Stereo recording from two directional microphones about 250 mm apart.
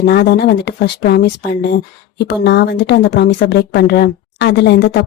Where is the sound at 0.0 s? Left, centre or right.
Left.